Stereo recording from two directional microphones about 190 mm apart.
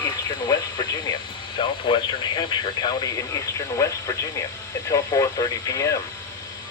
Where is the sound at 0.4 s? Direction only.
20° left (ahead or behind).